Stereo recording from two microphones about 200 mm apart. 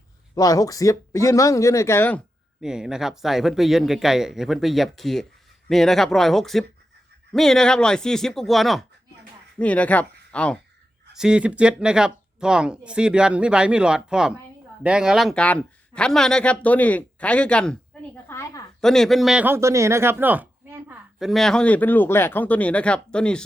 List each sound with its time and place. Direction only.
0.3 s speech: 15° left (ahead or behind)
2.6 s a man's voice: 5° right (ahead or behind); by 18.6 s 15° left (ahead or behind)
18.8 s a man's voice: centre (ahead or behind)